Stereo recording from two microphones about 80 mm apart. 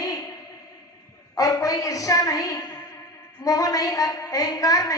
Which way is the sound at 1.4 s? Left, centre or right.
Left.